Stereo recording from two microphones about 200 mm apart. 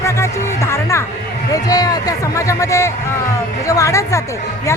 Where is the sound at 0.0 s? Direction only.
15° left (ahead or behind).